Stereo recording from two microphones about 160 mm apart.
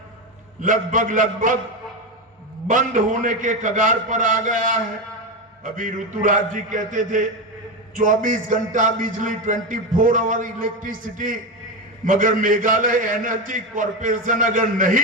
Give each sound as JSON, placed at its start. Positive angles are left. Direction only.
{"t": 0.6, "sound": "a man's voice", "side_deg": -55}
{"t": 2.6, "sound": "a man's voice", "side_deg": -55}